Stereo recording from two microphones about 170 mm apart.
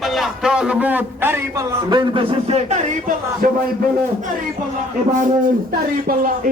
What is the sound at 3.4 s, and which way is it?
Speech, 55° right (ahead or behind).